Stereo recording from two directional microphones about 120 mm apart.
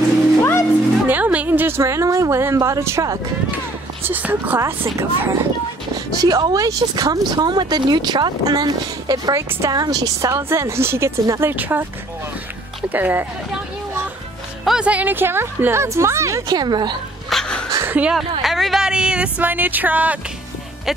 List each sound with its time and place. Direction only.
0.4 s music: 20° left (ahead or behind)
1.0 s a sound: 15° right (ahead or behind)
4.0 s speech: 15° right (ahead or behind)
12.9 s speech: 15° right (ahead or behind)
14.6 s speech: 5° right (ahead or behind); by 17.0 s 40° right (ahead or behind)
17.3 s dog: 5° left (ahead or behind)
17.7 s a sound: 15° right (ahead or behind)
18.4 s speech: centre (ahead or behind)